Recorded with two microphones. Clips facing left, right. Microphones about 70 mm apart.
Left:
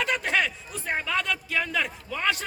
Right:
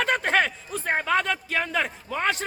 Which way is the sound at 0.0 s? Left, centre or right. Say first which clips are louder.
Right 3 dB; right.